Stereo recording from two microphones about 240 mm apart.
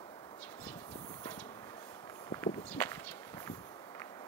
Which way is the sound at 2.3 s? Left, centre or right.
Centre.